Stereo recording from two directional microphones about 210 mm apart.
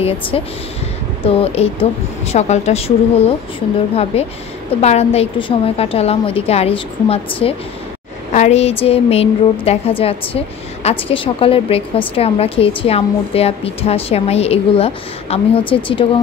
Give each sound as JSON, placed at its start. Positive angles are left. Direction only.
{"t": 0.3, "sound": "a woman's voice", "side_deg": 25}